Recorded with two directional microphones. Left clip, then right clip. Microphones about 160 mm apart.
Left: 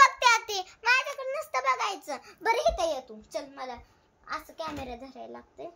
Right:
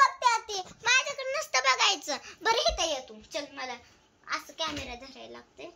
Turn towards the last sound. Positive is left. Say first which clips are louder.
# left 3 dB
turn(degrees=20)  # may be behind; listen again after turning